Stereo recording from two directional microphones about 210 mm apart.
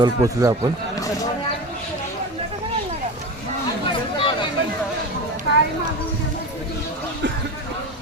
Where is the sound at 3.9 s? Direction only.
25° left (ahead or behind).